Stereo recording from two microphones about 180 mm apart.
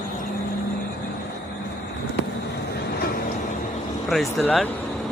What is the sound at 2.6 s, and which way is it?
Vehicle, 60° left (ahead or behind).